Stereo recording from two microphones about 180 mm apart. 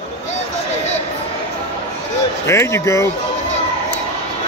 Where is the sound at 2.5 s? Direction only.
15° left (ahead or behind).